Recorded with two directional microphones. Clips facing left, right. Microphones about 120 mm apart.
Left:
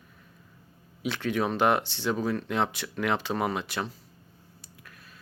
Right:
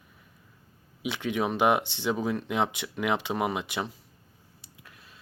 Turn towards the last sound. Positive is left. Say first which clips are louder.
# left 1 dB
turn(degrees=-20)  # may be behind; listen again after turning